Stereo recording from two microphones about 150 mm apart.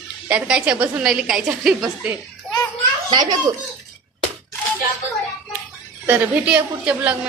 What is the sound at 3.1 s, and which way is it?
Speech, 30° right (ahead or behind).